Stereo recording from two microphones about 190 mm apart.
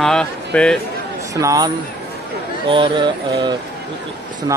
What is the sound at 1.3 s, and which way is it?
A man's voice, 15° right (ahead or behind).